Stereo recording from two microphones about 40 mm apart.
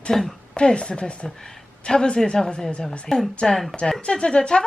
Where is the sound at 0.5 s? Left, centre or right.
Left.